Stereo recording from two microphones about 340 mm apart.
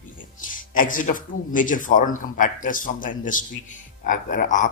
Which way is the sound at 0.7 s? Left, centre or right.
Left.